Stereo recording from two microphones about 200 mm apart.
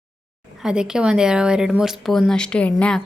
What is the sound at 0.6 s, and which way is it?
Speech, 5° right (ahead or behind).